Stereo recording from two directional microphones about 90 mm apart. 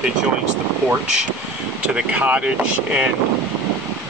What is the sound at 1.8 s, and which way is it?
Speech, 15° right (ahead or behind).